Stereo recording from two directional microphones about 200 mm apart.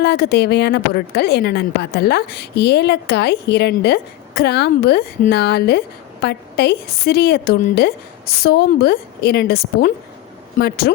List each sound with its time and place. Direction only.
0.0 s a woman's voice: 55° left (ahead or behind)